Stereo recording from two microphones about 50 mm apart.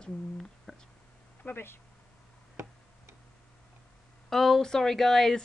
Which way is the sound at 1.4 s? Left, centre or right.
Left.